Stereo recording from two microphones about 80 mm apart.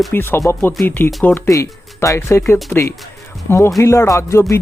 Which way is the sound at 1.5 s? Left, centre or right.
Left.